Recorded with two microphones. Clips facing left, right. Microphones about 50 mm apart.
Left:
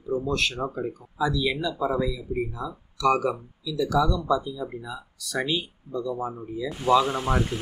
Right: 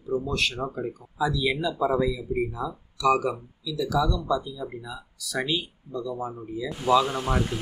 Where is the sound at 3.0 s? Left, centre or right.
Centre.